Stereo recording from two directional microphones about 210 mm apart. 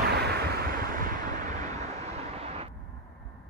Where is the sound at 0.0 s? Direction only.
50° right (ahead or behind).